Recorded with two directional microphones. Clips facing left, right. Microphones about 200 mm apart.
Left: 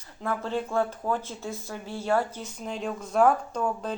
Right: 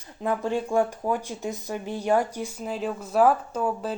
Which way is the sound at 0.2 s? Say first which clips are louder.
Right 3 dB; 15° right (ahead or behind).